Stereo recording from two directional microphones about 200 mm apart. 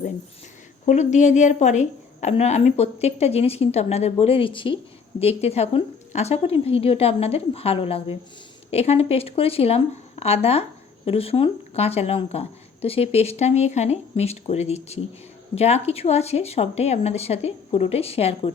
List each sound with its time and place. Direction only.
0.9 s a woman's voice: 35° left (ahead or behind)